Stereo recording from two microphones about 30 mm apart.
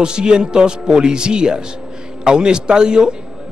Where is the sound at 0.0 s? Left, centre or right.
Right.